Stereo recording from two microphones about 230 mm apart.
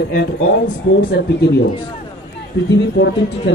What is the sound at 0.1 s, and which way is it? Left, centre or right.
A woman's voice, left.